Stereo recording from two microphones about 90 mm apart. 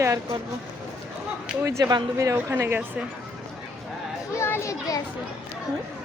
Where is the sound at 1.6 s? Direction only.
35° right (ahead or behind).